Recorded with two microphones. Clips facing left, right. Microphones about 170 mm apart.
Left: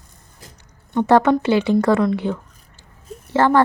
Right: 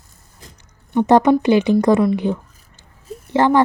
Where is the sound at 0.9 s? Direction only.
15° right (ahead or behind).